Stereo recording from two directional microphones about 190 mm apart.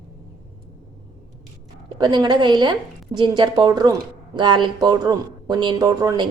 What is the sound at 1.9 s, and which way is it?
Speech, 25° right (ahead or behind).